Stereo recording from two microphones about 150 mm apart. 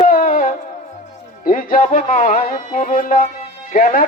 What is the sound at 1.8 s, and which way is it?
Music, 50° left (ahead or behind).